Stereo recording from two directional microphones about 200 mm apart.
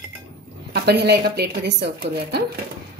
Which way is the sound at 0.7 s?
55° right (ahead or behind).